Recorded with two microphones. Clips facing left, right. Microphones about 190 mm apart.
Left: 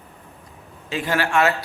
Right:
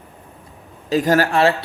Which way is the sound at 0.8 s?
40° right (ahead or behind).